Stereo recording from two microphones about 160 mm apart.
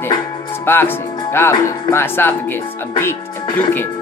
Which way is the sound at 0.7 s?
15° left (ahead or behind).